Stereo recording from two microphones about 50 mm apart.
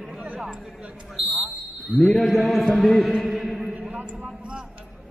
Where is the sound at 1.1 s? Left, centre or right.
Centre.